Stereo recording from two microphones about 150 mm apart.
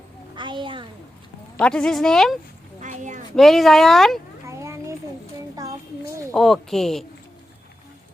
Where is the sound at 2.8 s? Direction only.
55° right (ahead or behind).